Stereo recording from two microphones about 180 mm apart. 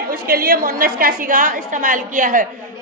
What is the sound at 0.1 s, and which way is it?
A woman's voice, 55° right (ahead or behind).